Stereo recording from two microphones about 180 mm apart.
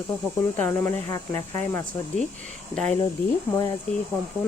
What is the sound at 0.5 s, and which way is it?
Speech, 15° left (ahead or behind).